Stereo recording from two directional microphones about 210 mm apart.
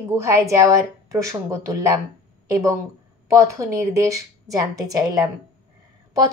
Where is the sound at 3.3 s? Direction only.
15° right (ahead or behind).